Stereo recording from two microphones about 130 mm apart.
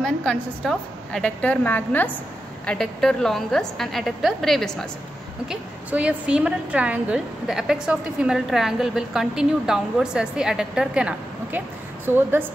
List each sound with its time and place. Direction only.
0.0 s a woman's voice: 5° left (ahead or behind)
5.5 s a woman's voice: 10° right (ahead or behind)